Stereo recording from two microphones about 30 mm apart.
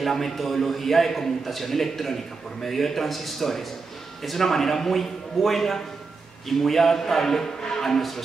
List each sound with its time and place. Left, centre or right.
0.0 s a man's voice: centre
7.8 s a man's voice: centre